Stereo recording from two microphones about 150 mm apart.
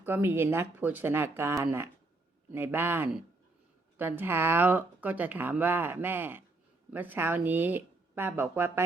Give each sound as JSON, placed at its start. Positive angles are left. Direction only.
{"t": 0.0, "sound": "speech", "side_deg": -15}